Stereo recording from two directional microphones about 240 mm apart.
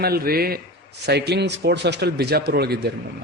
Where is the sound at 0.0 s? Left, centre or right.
Right.